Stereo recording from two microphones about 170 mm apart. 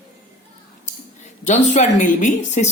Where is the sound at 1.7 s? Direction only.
45° left (ahead or behind).